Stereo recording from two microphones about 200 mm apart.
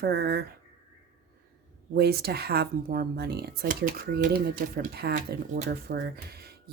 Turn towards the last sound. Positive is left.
turn(degrees=-50)  # may be behind; listen again after turning